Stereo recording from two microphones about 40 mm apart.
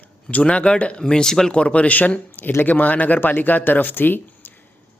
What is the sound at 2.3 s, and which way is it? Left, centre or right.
Speech, left.